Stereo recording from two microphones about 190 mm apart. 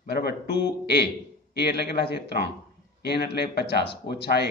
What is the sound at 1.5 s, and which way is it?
Speech, 60° left (ahead or behind).